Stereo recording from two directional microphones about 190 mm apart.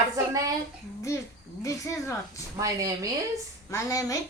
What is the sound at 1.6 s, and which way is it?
Speech, 15° left (ahead or behind).